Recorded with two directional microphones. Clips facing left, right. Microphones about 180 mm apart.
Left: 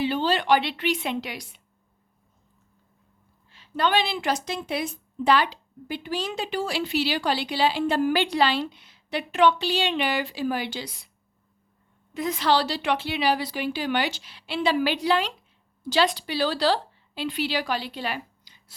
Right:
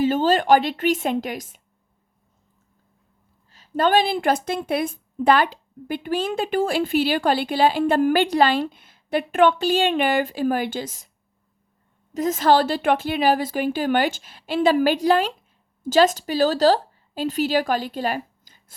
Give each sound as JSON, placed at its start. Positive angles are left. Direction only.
{"t": 0.0, "sound": "a woman's voice", "side_deg": -45}
{"t": 3.5, "sound": "a woman's voice", "side_deg": -45}
{"t": 12.1, "sound": "speech", "side_deg": -45}